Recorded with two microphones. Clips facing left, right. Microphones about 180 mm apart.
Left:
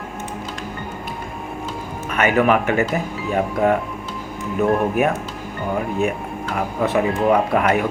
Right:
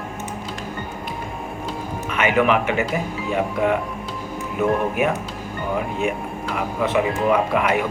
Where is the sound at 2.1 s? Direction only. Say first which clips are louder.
Left 2 dB; 40° left (ahead or behind).